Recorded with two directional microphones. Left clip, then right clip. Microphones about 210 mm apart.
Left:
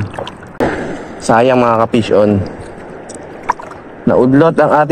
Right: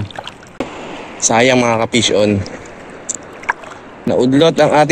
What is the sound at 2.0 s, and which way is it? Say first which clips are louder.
Speech: left 2 dB; 35° right (ahead or behind).